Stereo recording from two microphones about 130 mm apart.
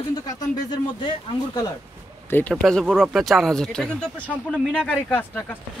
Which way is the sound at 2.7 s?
5° left (ahead or behind).